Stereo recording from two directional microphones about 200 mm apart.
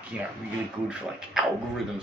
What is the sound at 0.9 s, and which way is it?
Speech, 5° right (ahead or behind).